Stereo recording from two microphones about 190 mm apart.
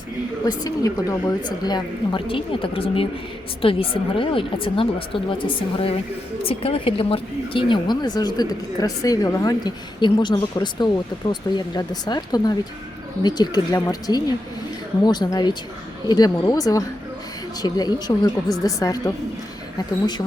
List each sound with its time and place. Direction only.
0.4 s speech: 20° left (ahead or behind)